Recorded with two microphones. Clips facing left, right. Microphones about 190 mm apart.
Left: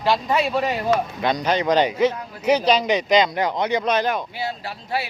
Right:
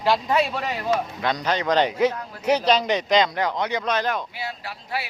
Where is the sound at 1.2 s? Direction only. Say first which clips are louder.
Left 3 dB; 15° left (ahead or behind).